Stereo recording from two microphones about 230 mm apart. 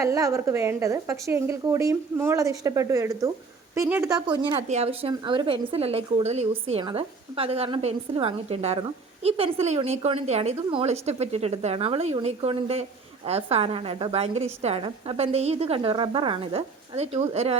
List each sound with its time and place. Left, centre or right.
0.0 s a woman's voice: centre